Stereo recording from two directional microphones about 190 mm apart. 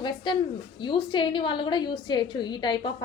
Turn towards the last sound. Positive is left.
turn(degrees=25)  # may be behind; listen again after turning